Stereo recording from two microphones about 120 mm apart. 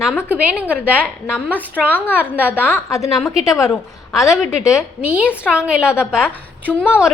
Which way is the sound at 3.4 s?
30° left (ahead or behind).